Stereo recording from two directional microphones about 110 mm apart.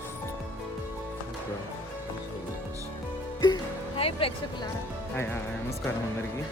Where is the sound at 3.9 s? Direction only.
60° left (ahead or behind).